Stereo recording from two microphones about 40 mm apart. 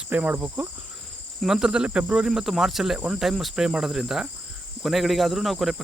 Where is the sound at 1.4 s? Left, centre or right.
Centre.